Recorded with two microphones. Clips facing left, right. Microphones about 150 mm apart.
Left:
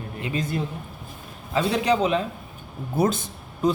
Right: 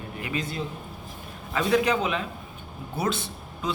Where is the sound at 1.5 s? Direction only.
30° left (ahead or behind).